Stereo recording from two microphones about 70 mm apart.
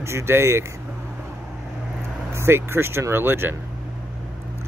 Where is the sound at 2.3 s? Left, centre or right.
Right.